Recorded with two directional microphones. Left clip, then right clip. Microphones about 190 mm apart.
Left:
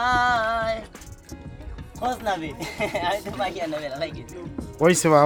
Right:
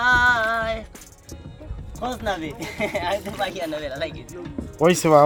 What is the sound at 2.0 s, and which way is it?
Speech, centre (ahead or behind).